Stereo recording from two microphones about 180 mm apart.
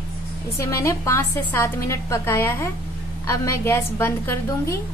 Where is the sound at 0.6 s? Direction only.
15° left (ahead or behind).